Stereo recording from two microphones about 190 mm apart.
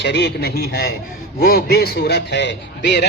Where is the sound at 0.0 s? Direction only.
65° left (ahead or behind).